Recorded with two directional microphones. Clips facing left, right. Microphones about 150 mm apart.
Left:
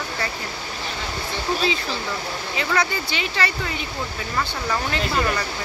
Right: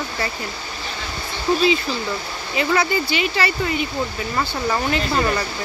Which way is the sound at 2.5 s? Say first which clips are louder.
Right 5 dB; 5° right (ahead or behind).